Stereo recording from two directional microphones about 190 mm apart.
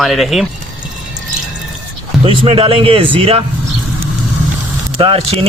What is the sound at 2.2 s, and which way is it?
A man's voice, 30° right (ahead or behind).